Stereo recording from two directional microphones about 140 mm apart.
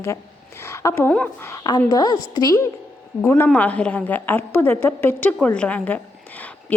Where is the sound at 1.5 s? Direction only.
30° left (ahead or behind).